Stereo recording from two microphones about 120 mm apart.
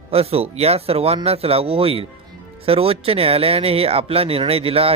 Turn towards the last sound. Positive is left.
turn(degrees=-55)  # may be behind; listen again after turning